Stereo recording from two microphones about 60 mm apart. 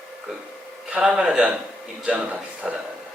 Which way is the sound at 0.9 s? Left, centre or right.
Centre.